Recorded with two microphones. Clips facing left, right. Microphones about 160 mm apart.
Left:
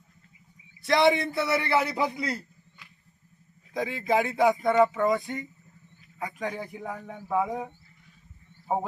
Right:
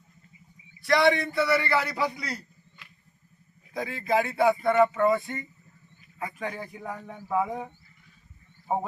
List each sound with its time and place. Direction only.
0.8 s a man's voice: 25° left (ahead or behind)
3.8 s speech: 20° left (ahead or behind)
6.5 s speech: 10° left (ahead or behind)